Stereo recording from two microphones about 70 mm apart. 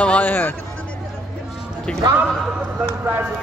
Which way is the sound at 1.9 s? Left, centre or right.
Centre.